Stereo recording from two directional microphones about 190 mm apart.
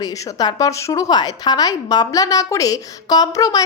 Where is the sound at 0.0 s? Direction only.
20° left (ahead or behind).